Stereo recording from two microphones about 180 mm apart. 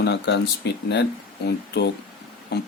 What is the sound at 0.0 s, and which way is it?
Speech, 70° left (ahead or behind).